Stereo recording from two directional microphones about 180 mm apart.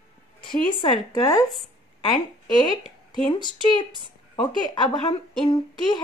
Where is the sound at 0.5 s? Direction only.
25° left (ahead or behind).